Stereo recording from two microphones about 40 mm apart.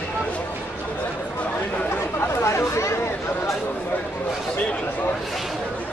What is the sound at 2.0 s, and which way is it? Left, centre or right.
Chatter, left.